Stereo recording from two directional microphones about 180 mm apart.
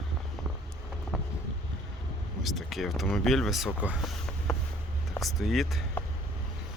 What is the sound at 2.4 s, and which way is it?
Speech, centre (ahead or behind).